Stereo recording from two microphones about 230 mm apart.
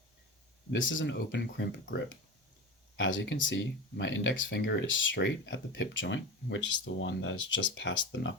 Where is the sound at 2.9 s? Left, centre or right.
Left.